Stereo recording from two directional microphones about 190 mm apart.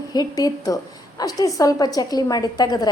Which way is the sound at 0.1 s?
20° left (ahead or behind).